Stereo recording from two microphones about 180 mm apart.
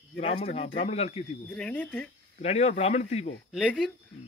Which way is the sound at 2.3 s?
35° left (ahead or behind).